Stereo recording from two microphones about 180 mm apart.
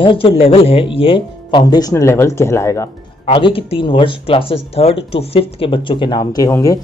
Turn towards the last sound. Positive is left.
turn(degrees=20)  # may be behind; listen again after turning